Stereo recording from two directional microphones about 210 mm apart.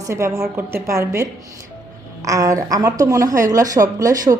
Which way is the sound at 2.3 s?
15° right (ahead or behind).